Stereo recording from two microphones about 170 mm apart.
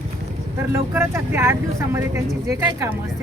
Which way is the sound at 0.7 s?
15° right (ahead or behind).